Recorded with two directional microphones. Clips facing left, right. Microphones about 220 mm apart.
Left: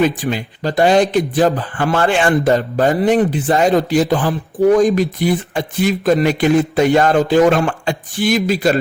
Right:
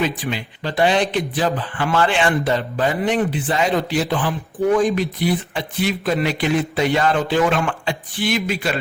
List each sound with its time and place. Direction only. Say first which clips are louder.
0.0 s speech: left 6 dB; 45° left (ahead or behind)